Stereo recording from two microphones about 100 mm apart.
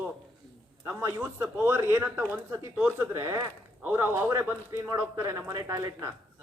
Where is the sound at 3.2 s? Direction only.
35° right (ahead or behind).